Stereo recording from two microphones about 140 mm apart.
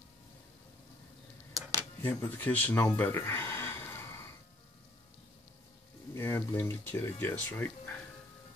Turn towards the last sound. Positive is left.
turn(degrees=15)  # may be behind; listen again after turning